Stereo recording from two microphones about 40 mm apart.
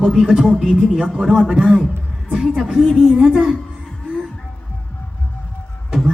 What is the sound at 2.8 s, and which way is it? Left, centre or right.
Speech, centre.